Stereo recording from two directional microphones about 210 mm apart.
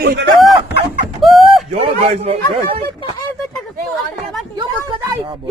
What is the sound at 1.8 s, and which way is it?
A man's voice, 30° right (ahead or behind).